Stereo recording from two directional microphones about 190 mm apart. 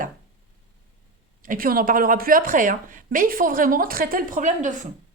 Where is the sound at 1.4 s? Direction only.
45° right (ahead or behind).